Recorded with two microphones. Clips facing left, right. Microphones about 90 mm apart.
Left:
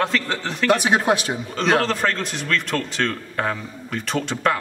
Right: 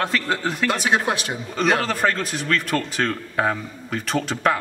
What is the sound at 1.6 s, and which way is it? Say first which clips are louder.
A man's voice: even; 5° right (ahead or behind).